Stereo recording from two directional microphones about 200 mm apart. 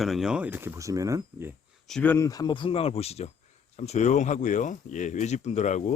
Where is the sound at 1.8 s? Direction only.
5° left (ahead or behind).